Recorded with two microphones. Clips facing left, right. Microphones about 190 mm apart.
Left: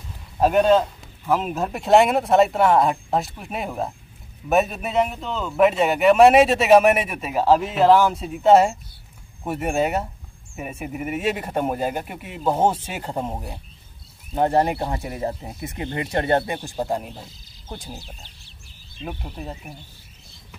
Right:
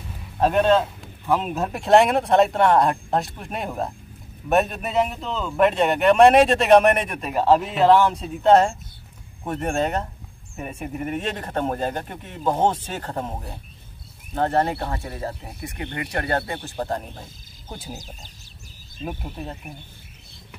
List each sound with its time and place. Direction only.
0.4 s a man's voice: 5° left (ahead or behind)
17.8 s speech: 45° right (ahead or behind)
19.0 s a man's voice: centre (ahead or behind)